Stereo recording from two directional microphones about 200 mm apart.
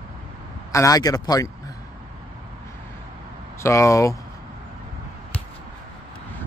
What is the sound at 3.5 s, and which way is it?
Speech, 15° left (ahead or behind).